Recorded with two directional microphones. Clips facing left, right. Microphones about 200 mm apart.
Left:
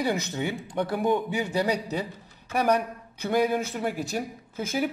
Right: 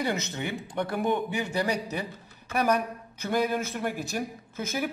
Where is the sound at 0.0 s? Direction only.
10° left (ahead or behind).